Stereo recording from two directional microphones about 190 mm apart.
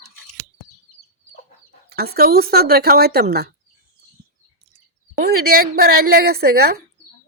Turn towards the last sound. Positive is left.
turn(degrees=-55)  # may be behind; listen again after turning